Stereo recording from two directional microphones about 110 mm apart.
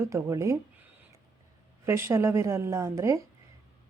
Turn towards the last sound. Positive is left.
turn(degrees=-25)  # may be behind; listen again after turning